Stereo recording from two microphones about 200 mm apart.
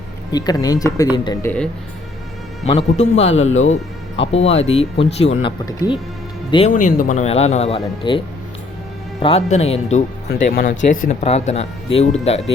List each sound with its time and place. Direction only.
0.3 s speech: 20° left (ahead or behind)
2.6 s speech: 30° left (ahead or behind)
3.3 s speech: 80° left
4.3 s speech: 30° left (ahead or behind)
6.7 s speech: 40° left (ahead or behind)
9.2 s speech: 30° left (ahead or behind)